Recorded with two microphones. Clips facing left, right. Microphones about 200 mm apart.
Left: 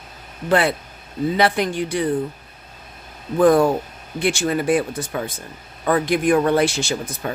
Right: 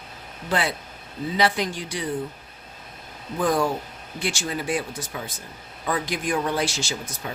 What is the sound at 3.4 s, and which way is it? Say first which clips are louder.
Speech: left 8 dB; 55° left (ahead or behind).